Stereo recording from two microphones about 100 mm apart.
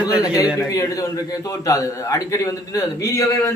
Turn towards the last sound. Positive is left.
turn(degrees=30)  # may be behind; listen again after turning